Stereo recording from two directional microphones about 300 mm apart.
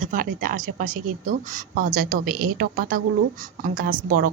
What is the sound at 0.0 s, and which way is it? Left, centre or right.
Speech, right.